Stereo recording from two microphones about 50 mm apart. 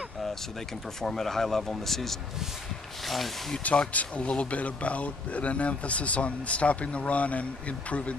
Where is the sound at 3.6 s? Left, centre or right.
Left.